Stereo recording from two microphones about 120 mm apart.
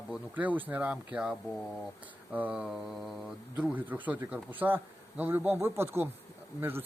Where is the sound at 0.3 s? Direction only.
15° right (ahead or behind).